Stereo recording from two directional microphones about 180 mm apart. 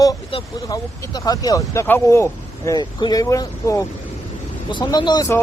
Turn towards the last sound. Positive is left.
turn(degrees=20)  # may be behind; listen again after turning